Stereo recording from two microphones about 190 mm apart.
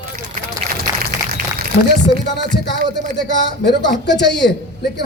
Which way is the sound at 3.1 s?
65° left (ahead or behind).